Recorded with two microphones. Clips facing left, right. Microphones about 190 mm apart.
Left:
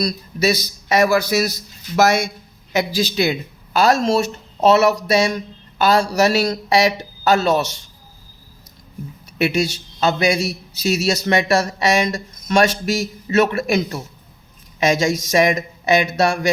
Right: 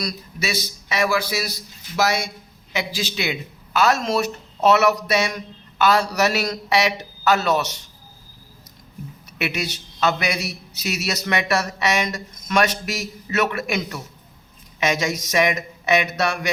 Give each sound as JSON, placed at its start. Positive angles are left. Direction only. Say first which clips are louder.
{"t": 0.0, "sound": "a man's voice", "louder": "left 8 dB", "side_deg": 35}
{"t": 2.7, "sound": "a man's voice", "louder": "left 7 dB", "side_deg": 40}
{"t": 9.4, "sound": "a man's voice", "louder": "left 8 dB", "side_deg": 30}